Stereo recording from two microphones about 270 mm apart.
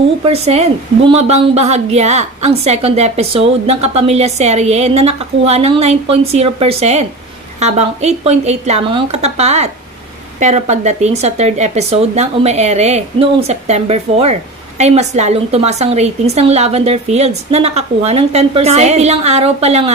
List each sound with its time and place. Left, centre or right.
0.2 s a woman's voice: right